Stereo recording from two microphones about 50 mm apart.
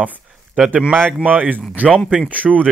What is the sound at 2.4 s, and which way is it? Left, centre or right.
Speech, left.